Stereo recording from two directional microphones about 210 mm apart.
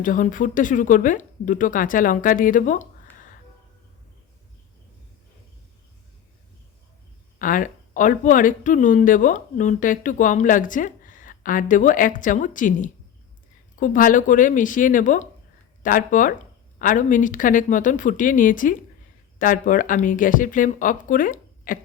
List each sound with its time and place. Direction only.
0.0 s speech: 40° left (ahead or behind)
7.3 s speech: 40° left (ahead or behind)